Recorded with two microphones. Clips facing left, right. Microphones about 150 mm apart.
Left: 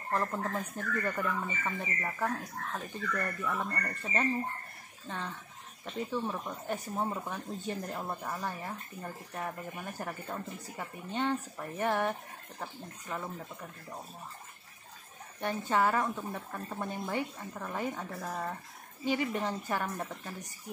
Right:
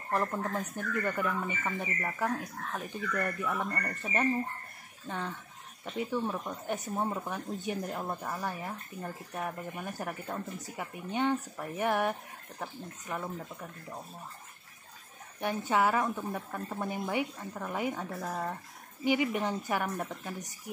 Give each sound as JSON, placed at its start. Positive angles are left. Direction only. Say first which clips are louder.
{"t": 0.5, "sound": "speech", "louder": "right 1 dB", "side_deg": 0}
{"t": 2.7, "sound": "a woman's voice", "louder": "right 2 dB", "side_deg": -15}
{"t": 6.7, "sound": "speech", "louder": "right 1 dB", "side_deg": -20}
{"t": 7.1, "sound": "speech", "louder": "right 2 dB", "side_deg": -5}
{"t": 7.3, "sound": "a woman's voice", "louder": "right 2 dB", "side_deg": -15}
{"t": 11.1, "sound": "a woman's voice", "louder": "right 2 dB", "side_deg": -15}
{"t": 15.4, "sound": "a woman's voice", "louder": "right 1 dB", "side_deg": -10}
{"t": 19.0, "sound": "a woman's voice", "louder": "right 3 dB", "side_deg": -15}